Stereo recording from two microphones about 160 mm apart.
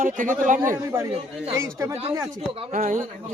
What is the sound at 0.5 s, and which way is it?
Speech, 15° right (ahead or behind).